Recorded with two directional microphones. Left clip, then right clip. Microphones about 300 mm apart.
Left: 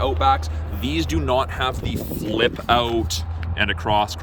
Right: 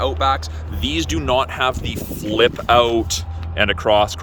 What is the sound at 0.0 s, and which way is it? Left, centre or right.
Speech, centre.